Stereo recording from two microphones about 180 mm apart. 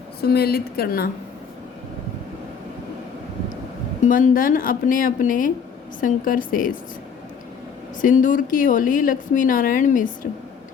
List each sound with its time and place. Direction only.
0.2 s a woman's voice: 60° left (ahead or behind)
4.0 s a woman's voice: 50° left (ahead or behind)
8.0 s a woman's voice: 45° left (ahead or behind)